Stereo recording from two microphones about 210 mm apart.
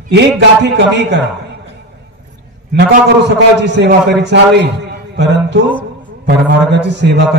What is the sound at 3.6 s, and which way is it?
A man's voice, 55° right (ahead or behind).